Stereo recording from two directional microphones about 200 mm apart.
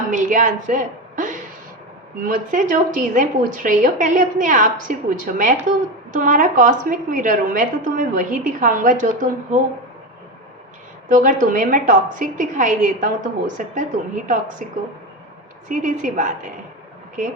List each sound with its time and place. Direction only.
0.1 s a woman's voice: 40° right (ahead or behind)
11.1 s a woman's voice: 40° right (ahead or behind)
15.7 s a woman's voice: 40° right (ahead or behind)